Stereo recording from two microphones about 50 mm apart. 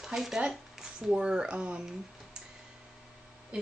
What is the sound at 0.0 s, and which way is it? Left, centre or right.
Speech, centre.